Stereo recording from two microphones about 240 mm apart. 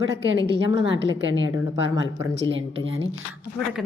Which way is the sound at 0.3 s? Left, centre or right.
Right.